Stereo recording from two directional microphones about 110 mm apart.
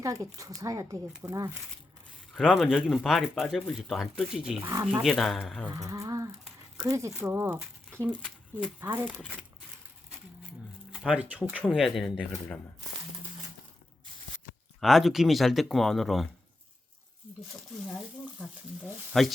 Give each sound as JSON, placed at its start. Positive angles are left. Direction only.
{"t": 0.0, "sound": "speech", "side_deg": -30}
{"t": 2.4, "sound": "speech", "side_deg": -5}
{"t": 5.7, "sound": "a sound", "side_deg": -30}
{"t": 6.8, "sound": "speech", "side_deg": -30}
{"t": 10.9, "sound": "speech", "side_deg": -10}
{"t": 14.8, "sound": "speech", "side_deg": 0}
{"t": 18.3, "sound": "speech", "side_deg": 0}